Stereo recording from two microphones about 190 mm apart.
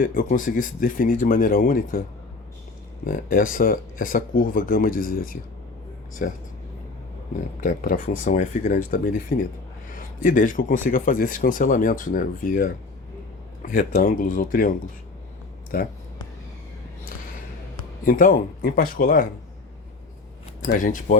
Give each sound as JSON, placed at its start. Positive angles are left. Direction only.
{"t": 0.0, "sound": "speech", "side_deg": 45}
{"t": 7.6, "sound": "speech", "side_deg": 45}
{"t": 15.7, "sound": "speech", "side_deg": 50}
{"t": 18.0, "sound": "speech", "side_deg": 45}
{"t": 20.7, "sound": "speech", "side_deg": 45}